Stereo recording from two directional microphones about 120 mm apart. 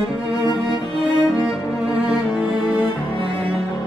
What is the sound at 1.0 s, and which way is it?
Music, 10° right (ahead or behind).